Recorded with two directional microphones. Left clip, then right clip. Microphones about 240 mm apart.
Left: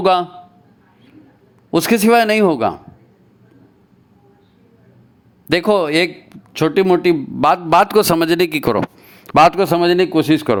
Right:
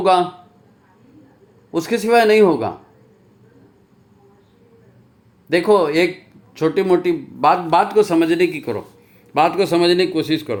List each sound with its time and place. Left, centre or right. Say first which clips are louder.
0.0 s a man's voice: even; left
1.7 s a man's voice: left 3 dB; left
5.5 s a man's voice: even; left